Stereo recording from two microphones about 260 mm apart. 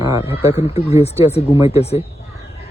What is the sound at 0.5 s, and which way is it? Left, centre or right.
Speech, left.